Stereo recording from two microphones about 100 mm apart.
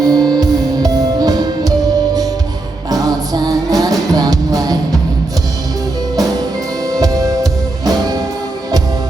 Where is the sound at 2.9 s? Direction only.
40° right (ahead or behind).